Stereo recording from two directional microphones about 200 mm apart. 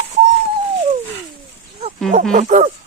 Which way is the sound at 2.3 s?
35° right (ahead or behind).